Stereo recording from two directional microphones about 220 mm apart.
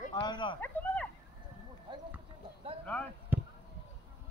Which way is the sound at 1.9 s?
20° right (ahead or behind).